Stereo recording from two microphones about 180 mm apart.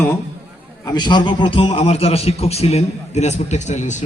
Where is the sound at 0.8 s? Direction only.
25° left (ahead or behind); by 4.0 s 40° left (ahead or behind).